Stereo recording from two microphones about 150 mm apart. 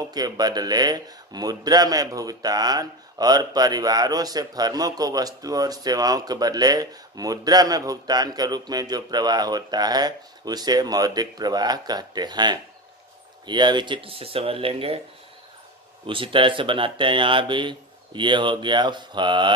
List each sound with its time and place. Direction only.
0.1 s speech: 25° right (ahead or behind)
16.1 s speech: 35° right (ahead or behind)